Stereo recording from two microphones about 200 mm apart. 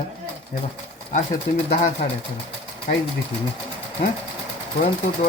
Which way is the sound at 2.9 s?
35° left (ahead or behind).